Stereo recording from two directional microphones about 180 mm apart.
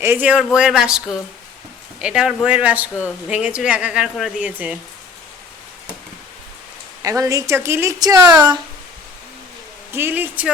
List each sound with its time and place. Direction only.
0.0 s speech: 10° right (ahead or behind)
7.0 s a woman's voice: 20° right (ahead or behind)
9.9 s speech: 10° right (ahead or behind)